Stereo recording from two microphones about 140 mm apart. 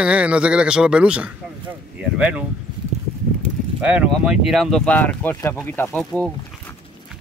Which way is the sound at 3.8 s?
5° right (ahead or behind).